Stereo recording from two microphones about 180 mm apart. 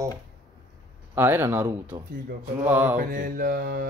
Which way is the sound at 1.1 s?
10° right (ahead or behind).